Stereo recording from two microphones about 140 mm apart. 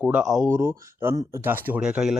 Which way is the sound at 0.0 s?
5° right (ahead or behind).